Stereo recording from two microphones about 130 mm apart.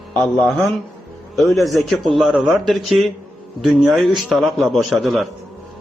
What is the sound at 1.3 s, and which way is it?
A man's voice, centre (ahead or behind).